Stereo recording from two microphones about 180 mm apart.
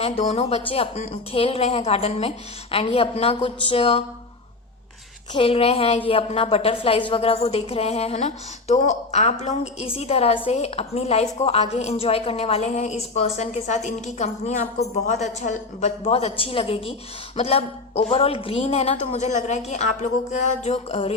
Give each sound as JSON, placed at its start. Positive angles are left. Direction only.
{"t": 0.0, "sound": "a woman's voice", "side_deg": 35}
{"t": 5.3, "sound": "a woman's voice", "side_deg": 30}